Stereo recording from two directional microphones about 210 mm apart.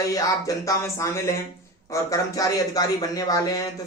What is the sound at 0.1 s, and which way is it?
A man's voice, 15° left (ahead or behind).